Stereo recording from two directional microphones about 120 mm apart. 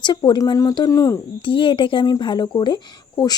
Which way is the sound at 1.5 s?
45° left (ahead or behind).